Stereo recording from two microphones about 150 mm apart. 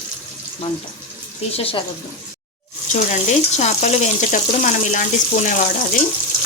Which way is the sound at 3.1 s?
50° left (ahead or behind).